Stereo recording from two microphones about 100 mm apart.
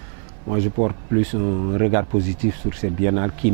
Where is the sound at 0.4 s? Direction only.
20° right (ahead or behind).